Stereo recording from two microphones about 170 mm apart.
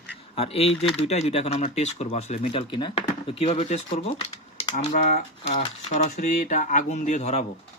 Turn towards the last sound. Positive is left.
turn(degrees=40)  # may be behind; listen again after turning